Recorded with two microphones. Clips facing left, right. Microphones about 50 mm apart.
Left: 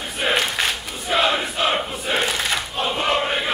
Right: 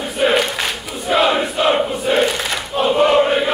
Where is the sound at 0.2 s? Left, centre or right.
Centre.